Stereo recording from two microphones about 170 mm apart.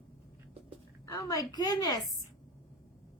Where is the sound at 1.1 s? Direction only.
20° left (ahead or behind).